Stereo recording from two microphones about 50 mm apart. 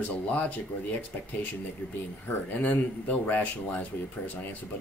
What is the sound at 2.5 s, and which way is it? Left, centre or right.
Speech, left.